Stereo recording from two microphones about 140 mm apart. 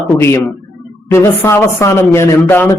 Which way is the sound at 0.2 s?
15° left (ahead or behind).